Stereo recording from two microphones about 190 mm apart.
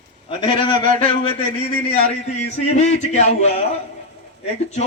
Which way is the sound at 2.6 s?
35° left (ahead or behind).